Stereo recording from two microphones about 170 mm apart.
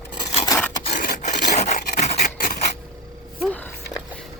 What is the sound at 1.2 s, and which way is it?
Filing, 45° left (ahead or behind).